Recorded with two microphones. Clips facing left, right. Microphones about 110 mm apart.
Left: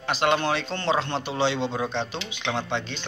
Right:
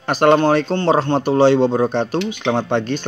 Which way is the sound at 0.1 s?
45° right (ahead or behind).